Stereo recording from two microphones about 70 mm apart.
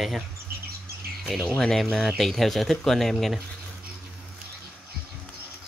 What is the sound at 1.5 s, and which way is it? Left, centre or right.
Speech, centre.